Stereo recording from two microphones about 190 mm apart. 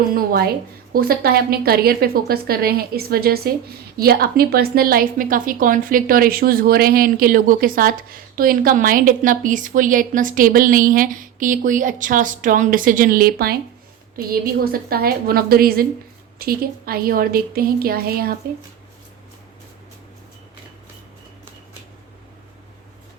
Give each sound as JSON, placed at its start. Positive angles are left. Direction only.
{"t": 0.1, "sound": "a woman's voice", "side_deg": -50}